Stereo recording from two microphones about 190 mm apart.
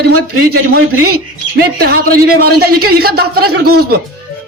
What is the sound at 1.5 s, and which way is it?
Speech, 55° right (ahead or behind).